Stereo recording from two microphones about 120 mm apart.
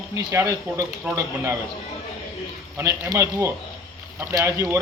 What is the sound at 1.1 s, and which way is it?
Speech, 10° right (ahead or behind).